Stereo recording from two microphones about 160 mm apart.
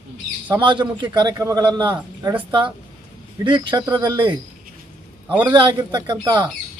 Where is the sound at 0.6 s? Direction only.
30° right (ahead or behind).